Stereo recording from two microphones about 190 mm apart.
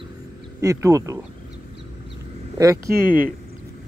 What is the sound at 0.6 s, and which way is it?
Speech, 15° right (ahead or behind).